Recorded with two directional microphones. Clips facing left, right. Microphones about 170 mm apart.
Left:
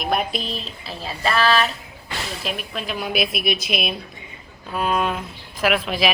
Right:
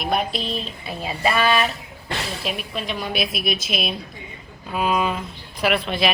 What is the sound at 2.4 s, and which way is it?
A woman's voice, centre (ahead or behind).